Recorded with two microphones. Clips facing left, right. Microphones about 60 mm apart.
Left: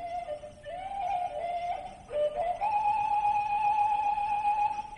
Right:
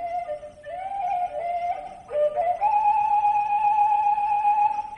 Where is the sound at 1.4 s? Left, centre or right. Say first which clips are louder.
Right 6 dB; right.